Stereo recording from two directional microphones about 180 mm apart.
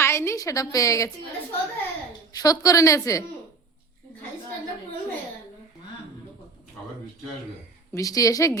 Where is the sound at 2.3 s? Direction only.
20° left (ahead or behind).